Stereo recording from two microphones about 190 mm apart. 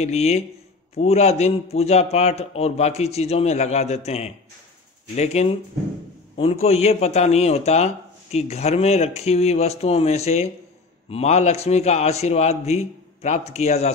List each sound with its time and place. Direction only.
0.0 s speech: 35° left (ahead or behind)